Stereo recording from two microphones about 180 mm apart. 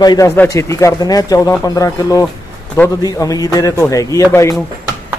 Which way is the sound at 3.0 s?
20° left (ahead or behind).